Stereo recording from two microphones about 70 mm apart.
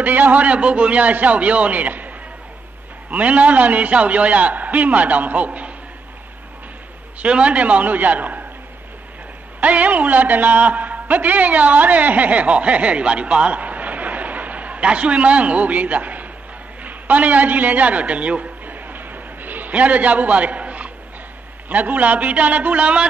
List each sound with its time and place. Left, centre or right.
0.0 s a man's voice: right
7.2 s a man's voice: centre
9.6 s a man's voice: right
16.8 s a sound: right
21.6 s a man's voice: right